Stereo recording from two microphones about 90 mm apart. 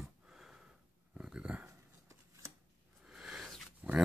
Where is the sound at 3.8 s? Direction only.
15° right (ahead or behind).